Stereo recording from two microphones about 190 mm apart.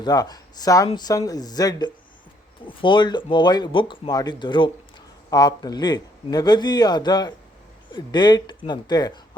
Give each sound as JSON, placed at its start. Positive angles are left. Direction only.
{"t": 0.0, "sound": "speech", "side_deg": 20}